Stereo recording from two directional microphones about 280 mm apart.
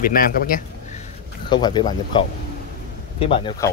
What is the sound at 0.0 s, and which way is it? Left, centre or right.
A man's voice, left.